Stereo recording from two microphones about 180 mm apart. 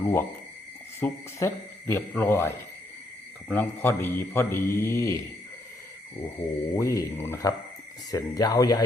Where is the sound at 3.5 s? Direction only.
10° left (ahead or behind).